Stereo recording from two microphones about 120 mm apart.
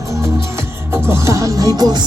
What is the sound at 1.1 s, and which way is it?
Music, 25° right (ahead or behind).